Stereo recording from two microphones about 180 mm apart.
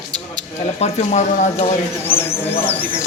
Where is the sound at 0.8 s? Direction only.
40° left (ahead or behind).